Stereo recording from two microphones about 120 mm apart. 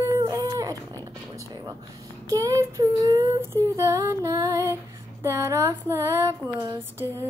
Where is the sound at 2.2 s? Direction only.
30° right (ahead or behind).